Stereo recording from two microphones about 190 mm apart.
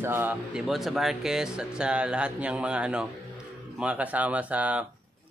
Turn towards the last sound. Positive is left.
turn(degrees=-5)  # may be behind; listen again after turning